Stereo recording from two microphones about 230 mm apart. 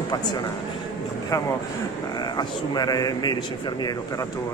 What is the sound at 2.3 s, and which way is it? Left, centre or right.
Speech, centre.